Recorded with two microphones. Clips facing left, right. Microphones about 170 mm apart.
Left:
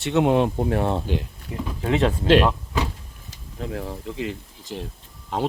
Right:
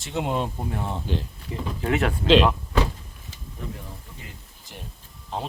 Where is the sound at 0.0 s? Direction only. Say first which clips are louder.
Left 8 dB; 65° left (ahead or behind).